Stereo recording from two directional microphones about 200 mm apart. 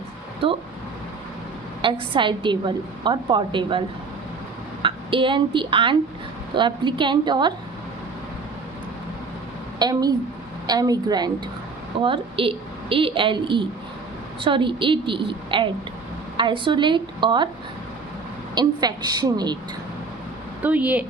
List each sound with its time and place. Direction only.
0.4 s a woman's voice: 25° right (ahead or behind)
1.8 s a woman's voice: 25° right (ahead or behind)
9.7 s a woman's voice: 20° right (ahead or behind)
18.5 s a woman's voice: 20° right (ahead or behind)
20.6 s speech: 10° right (ahead or behind)